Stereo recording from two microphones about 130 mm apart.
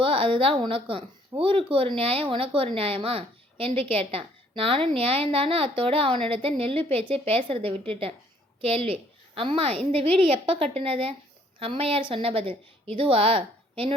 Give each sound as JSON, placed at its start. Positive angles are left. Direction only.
{"t": 0.0, "sound": "speech", "side_deg": -45}